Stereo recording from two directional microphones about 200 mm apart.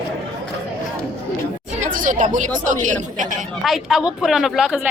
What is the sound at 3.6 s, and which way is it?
Speech, centre (ahead or behind).